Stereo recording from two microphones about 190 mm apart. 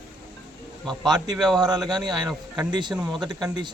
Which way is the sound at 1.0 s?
20° right (ahead or behind).